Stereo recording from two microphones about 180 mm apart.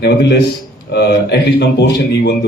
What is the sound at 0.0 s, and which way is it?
Speech, 65° left (ahead or behind).